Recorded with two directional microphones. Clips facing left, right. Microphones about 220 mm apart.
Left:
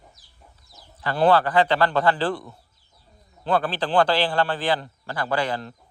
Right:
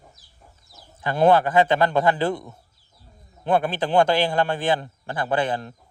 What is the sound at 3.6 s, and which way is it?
A man's voice, 20° right (ahead or behind).